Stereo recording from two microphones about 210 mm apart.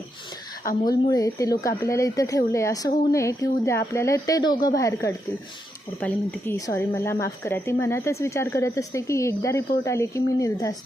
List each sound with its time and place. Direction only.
0.6 s a woman's voice: 40° left (ahead or behind)
0.9 s speech: 15° left (ahead or behind)